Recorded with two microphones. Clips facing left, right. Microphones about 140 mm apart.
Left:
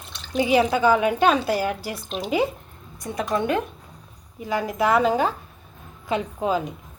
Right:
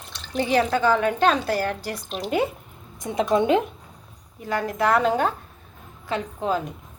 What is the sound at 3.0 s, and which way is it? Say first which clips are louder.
Speech: right 4 dB; 20° right (ahead or behind).